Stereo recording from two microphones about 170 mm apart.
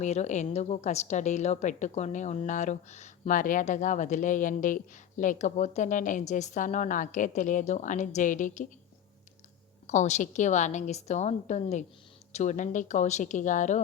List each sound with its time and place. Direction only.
0.0 s a woman's voice: 45° left (ahead or behind)
9.8 s a woman's voice: 45° left (ahead or behind)